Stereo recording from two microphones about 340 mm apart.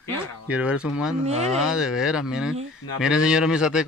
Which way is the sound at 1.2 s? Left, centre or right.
Centre.